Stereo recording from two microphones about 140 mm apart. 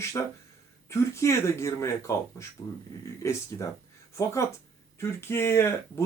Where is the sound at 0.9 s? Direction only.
20° left (ahead or behind).